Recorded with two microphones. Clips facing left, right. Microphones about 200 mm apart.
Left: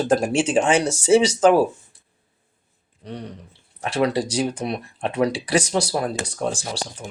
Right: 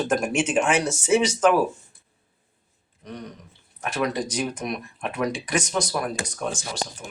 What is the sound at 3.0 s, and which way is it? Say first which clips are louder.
Speech: left 3 dB; 30° left (ahead or behind).